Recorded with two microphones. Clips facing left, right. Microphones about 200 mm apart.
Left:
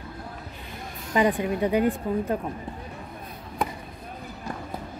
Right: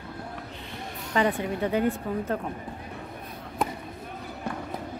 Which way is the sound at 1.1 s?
15° left (ahead or behind).